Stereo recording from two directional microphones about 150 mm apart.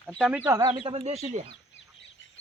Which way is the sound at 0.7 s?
40° right (ahead or behind).